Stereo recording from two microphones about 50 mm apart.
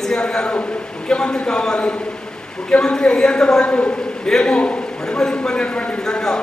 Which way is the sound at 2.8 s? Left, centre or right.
Centre.